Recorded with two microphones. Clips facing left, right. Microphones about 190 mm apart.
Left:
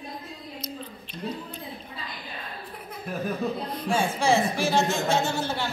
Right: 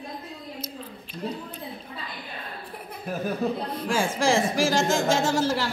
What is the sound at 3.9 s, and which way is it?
Speech, 90° right.